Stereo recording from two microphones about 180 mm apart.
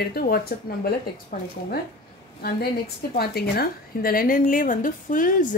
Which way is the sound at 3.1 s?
60° left (ahead or behind).